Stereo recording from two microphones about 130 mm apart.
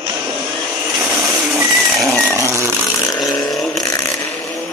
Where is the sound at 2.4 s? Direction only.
25° right (ahead or behind).